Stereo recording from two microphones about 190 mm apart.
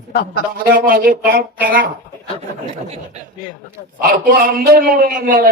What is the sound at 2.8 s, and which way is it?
Speech, 35° right (ahead or behind).